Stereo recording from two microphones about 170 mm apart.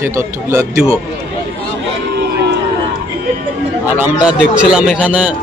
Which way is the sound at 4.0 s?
5° right (ahead or behind).